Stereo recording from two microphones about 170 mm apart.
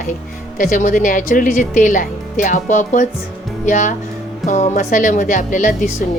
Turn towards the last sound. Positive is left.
turn(degrees=50)  # may be behind; listen again after turning